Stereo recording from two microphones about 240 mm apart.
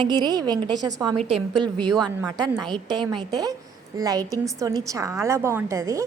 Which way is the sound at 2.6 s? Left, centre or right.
Centre.